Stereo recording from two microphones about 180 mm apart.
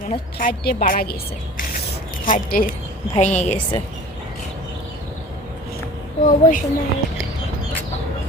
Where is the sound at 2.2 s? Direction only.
50° left (ahead or behind).